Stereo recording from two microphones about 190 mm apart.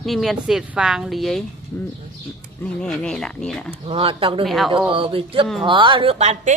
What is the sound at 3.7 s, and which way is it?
Speech, 30° right (ahead or behind).